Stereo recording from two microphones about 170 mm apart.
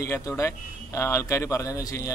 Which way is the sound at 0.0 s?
15° left (ahead or behind).